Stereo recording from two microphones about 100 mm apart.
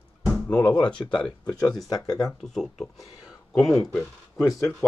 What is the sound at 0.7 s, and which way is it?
Speech, 10° left (ahead or behind).